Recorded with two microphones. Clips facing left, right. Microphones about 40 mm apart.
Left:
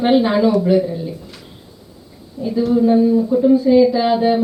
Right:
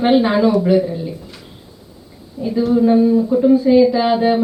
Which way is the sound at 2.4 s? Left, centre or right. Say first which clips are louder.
Right 1 dB; centre.